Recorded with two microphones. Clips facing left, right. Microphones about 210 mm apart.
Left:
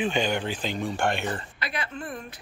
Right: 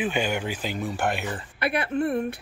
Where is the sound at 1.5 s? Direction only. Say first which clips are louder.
Right 9 dB; 60° right (ahead or behind).